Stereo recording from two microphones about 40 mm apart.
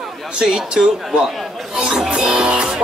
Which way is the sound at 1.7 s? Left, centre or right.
Centre.